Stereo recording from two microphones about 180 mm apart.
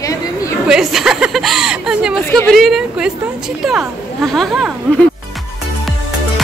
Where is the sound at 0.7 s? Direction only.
Centre (ahead or behind).